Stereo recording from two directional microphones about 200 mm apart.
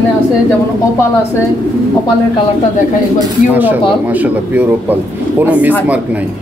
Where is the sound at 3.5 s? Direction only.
10° right (ahead or behind).